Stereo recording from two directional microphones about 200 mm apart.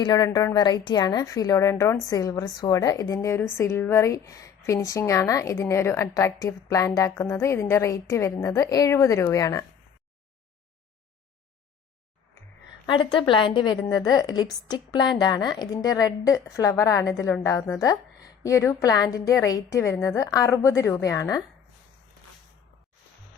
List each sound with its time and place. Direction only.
0.0 s a woman's voice: 20° left (ahead or behind)
12.8 s a woman's voice: 25° left (ahead or behind)